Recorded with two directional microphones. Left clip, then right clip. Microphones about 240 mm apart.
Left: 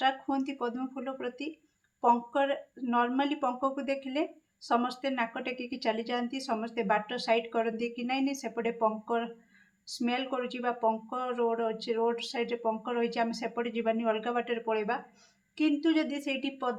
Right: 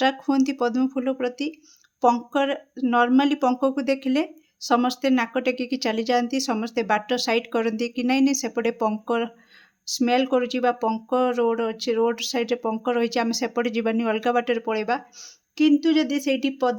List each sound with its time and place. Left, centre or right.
0.0 s speech: right